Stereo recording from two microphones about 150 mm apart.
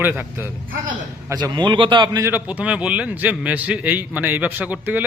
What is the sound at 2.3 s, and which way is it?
A man's voice, 10° right (ahead or behind).